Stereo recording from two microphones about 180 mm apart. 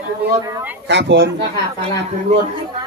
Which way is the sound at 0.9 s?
75° right (ahead or behind).